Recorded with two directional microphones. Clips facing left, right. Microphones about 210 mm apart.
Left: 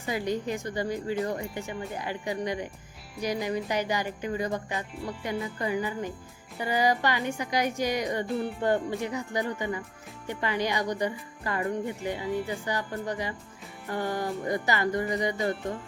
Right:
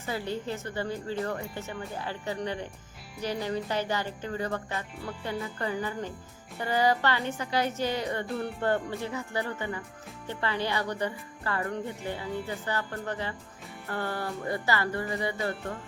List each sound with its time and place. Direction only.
0.0 s speech: 15° left (ahead or behind)
8.3 s speech: centre (ahead or behind)
8.6 s speech: 15° left (ahead or behind)